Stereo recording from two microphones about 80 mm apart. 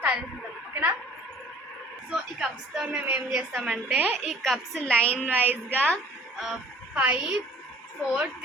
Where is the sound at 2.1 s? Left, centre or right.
Centre.